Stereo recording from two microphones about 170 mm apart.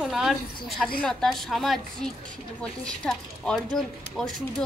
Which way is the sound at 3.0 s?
5° left (ahead or behind).